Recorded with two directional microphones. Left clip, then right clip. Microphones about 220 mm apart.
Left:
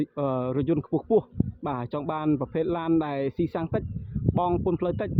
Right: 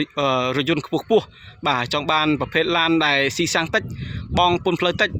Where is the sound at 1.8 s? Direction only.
5° right (ahead or behind).